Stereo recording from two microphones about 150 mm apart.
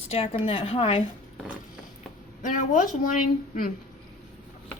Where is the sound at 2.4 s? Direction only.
55° left (ahead or behind).